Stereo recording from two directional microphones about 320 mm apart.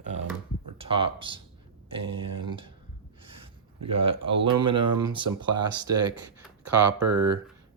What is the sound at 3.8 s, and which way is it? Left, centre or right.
Speech, centre.